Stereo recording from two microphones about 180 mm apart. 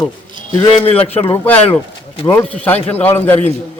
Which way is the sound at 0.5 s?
25° left (ahead or behind).